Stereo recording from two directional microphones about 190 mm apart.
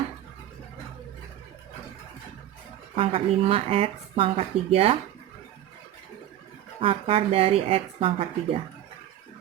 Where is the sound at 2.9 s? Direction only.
30° right (ahead or behind).